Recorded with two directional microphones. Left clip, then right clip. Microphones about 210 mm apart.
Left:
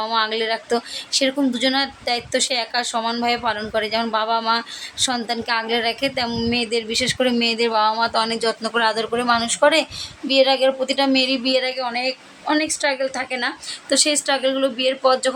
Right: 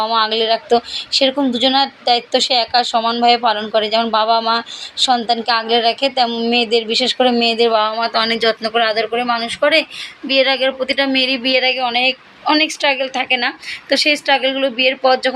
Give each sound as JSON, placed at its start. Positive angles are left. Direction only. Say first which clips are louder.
{"t": 0.0, "sound": "speech", "louder": "right 5 dB", "side_deg": 0}
{"t": 8.6, "sound": "speech", "louder": "right 4 dB", "side_deg": 10}